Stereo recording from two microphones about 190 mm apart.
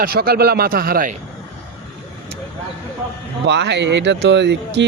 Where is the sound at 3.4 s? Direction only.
65° right (ahead or behind).